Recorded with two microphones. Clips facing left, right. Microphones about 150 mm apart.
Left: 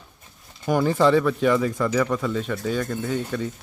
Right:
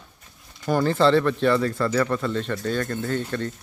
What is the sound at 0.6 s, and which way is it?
A man's voice, 10° left (ahead or behind).